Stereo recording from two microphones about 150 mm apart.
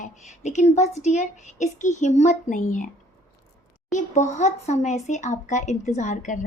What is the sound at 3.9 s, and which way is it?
A woman's voice, 50° left (ahead or behind).